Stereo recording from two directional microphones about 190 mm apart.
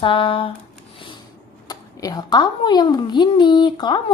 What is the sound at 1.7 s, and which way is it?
A woman's voice, 20° left (ahead or behind).